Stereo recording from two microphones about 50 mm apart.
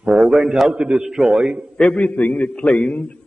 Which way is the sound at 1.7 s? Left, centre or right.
Centre.